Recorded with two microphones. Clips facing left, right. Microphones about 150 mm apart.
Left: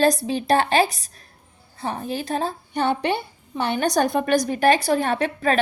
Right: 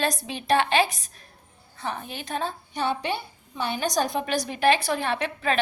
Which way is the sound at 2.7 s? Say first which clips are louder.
Left 6 dB; 60° left (ahead or behind).